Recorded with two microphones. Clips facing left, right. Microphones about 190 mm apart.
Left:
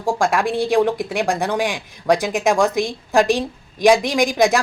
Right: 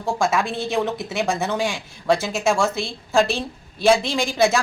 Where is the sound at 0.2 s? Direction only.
15° left (ahead or behind).